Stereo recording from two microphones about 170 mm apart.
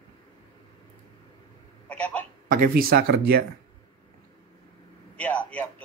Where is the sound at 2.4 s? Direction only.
55° right (ahead or behind).